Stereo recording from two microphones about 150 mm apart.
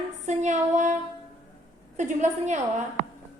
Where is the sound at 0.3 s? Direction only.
50° right (ahead or behind).